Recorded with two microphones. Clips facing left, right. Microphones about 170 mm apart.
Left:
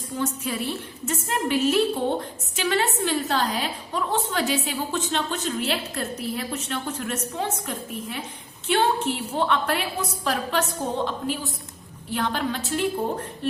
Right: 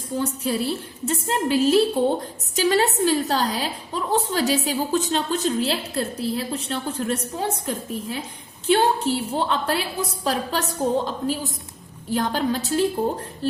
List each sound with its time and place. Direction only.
0.2 s a woman's voice: 35° right (ahead or behind)